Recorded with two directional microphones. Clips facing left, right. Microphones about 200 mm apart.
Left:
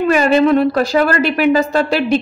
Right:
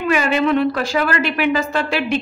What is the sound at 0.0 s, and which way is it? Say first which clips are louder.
A woman's voice: left 6 dB; 40° left (ahead or behind).